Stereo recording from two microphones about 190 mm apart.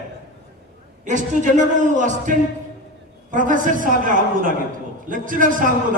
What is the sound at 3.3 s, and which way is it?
A man's voice, 45° right (ahead or behind).